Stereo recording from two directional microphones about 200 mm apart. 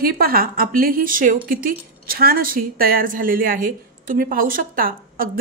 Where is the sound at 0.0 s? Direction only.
50° right (ahead or behind).